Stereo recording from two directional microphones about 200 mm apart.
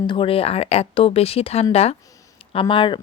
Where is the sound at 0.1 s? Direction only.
25° left (ahead or behind).